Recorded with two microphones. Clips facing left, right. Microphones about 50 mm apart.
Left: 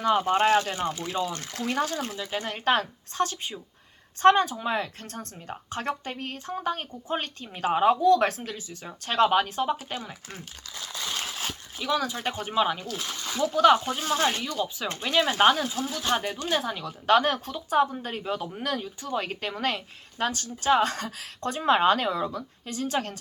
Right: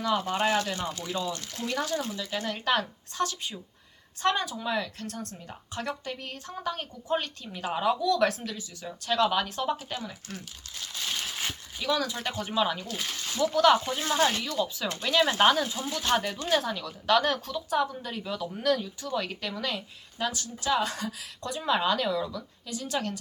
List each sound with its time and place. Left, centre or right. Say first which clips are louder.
0.0 s speech: left 5 dB; left
2.1 s speech: left 1 dB; left
9.6 s speech: left 1 dB; centre
11.8 s speech: left 1 dB; centre
12.2 s speech: left 2 dB; left
13.9 s speech: left 1 dB; centre
14.6 s speech: even; left; by 16.0 s centre
16.1 s speech: right 2 dB; left